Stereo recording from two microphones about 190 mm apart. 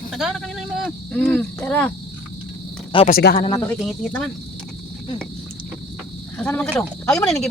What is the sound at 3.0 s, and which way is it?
Speech, 50° left (ahead or behind).